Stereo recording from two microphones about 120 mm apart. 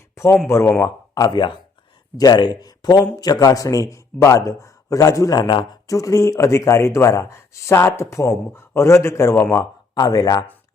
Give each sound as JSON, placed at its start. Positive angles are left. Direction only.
{"t": 0.4, "sound": "speech", "side_deg": 25}
{"t": 1.1, "sound": "speech", "side_deg": 35}
{"t": 6.0, "sound": "speech", "side_deg": 25}